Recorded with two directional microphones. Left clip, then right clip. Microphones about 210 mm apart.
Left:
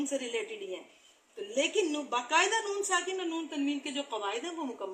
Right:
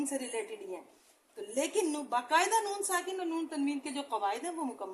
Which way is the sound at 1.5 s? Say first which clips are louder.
Left 2 dB; 45° right (ahead or behind).